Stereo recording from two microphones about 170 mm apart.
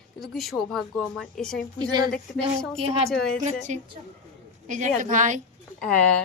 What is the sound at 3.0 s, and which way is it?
Speech, 5° left (ahead or behind).